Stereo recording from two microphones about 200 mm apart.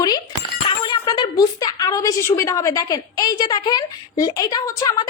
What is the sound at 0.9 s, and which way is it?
A woman's voice, 20° left (ahead or behind).